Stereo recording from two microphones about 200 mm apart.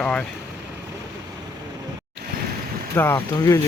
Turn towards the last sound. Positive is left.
turn(degrees=15)  # may be behind; listen again after turning